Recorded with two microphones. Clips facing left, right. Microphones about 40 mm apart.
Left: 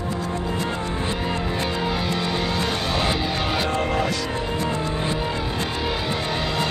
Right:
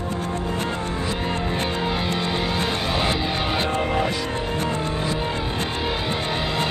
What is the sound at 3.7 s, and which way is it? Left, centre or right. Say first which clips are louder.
Music: even; centre.